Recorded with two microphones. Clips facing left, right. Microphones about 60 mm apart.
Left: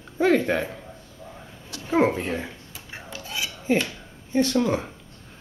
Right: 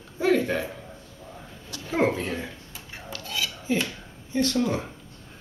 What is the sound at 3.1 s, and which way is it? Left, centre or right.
Dishes, centre.